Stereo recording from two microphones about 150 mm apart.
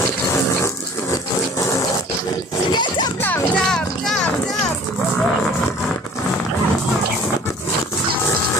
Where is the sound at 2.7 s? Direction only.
30° left (ahead or behind).